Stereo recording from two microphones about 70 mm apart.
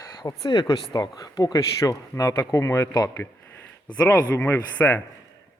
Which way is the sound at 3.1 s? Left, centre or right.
Left.